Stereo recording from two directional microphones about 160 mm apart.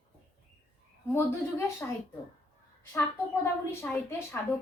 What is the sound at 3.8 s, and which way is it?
Speech, 15° left (ahead or behind).